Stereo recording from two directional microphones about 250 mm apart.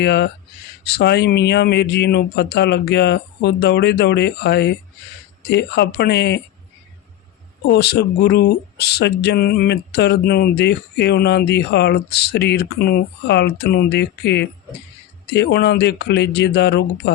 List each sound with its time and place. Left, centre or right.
0.0 s speech: left
7.7 s speech: left